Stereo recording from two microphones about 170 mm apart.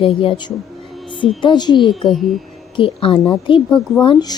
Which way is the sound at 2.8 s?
35° left (ahead or behind).